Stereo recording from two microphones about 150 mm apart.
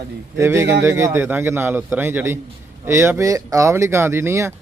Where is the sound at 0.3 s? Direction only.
20° right (ahead or behind).